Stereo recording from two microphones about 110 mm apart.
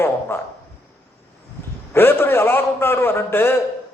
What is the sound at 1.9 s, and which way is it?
A man's voice, 20° left (ahead or behind).